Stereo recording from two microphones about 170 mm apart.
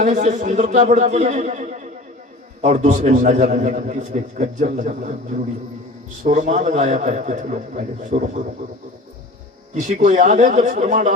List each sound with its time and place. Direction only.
0.0 s a man's voice: 45° right (ahead or behind)
6.2 s a man's voice: 45° right (ahead or behind)
9.8 s a man's voice: 45° right (ahead or behind)